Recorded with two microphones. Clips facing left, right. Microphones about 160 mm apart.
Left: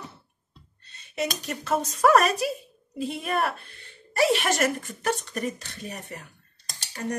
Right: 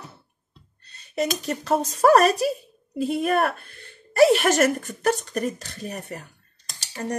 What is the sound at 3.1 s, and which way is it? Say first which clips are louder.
Speech: right 5 dB; 50° right (ahead or behind).